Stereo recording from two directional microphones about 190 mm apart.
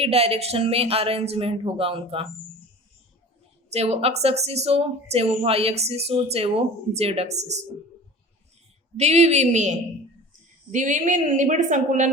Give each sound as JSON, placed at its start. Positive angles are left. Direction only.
{"t": 0.0, "sound": "speech", "side_deg": -30}
{"t": 3.7, "sound": "speech", "side_deg": -35}
{"t": 9.0, "sound": "speech", "side_deg": -35}